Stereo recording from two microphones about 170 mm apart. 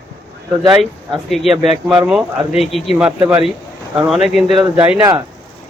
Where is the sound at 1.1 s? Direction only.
Centre (ahead or behind).